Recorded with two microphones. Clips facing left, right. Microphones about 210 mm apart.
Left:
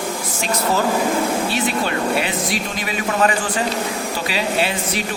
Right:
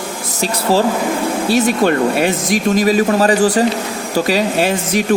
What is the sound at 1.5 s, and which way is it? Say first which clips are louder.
Speech: right 8 dB; 45° right (ahead or behind).